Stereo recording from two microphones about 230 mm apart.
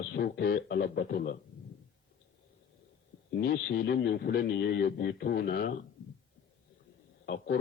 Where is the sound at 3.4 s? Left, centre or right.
Left.